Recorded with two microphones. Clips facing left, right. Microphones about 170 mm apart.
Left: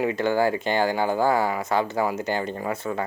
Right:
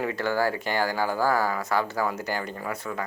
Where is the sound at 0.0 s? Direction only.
20° left (ahead or behind).